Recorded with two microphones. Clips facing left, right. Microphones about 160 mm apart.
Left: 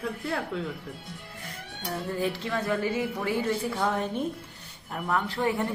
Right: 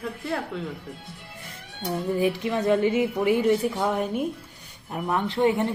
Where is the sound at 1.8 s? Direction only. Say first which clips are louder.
Right 6 dB; 15° right (ahead or behind).